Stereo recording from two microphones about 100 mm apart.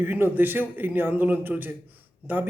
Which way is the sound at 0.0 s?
20° right (ahead or behind).